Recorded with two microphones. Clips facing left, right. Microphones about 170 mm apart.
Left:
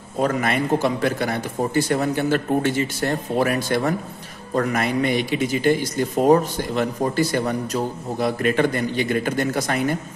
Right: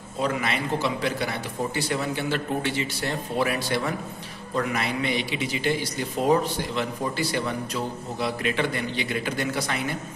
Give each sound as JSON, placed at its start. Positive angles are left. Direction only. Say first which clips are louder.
{"t": 0.2, "sound": "speech", "louder": "left 5 dB", "side_deg": 50}